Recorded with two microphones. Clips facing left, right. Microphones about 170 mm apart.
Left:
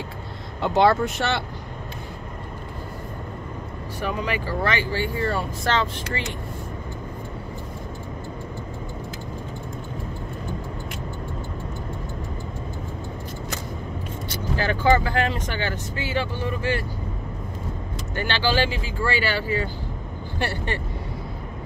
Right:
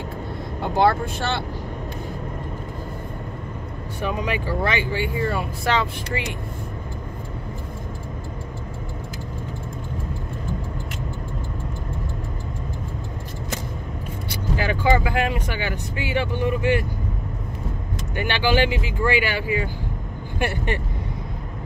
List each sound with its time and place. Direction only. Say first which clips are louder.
1.0 s speech: left 2 dB; 70° left (ahead or behind)
4.2 s speech: right 1 dB; 15° right (ahead or behind)
14.3 s speech: right 1 dB; 15° right (ahead or behind)
18.1 s speech: right 2 dB; 15° right (ahead or behind)